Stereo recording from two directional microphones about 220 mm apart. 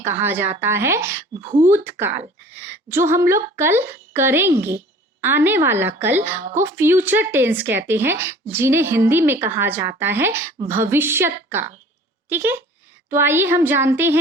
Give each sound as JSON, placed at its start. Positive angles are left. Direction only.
{"t": 0.0, "sound": "speech", "side_deg": -10}
{"t": 1.4, "sound": "speech", "side_deg": -30}
{"t": 1.7, "sound": "speech", "side_deg": -10}